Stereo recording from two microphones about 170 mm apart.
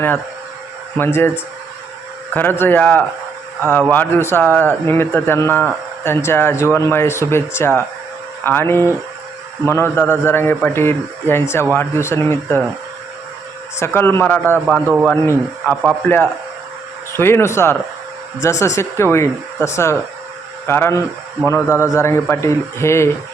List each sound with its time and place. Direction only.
0.9 s a man's voice: 15° left (ahead or behind)
2.3 s a man's voice: 10° left (ahead or behind)
13.7 s a man's voice: 15° left (ahead or behind)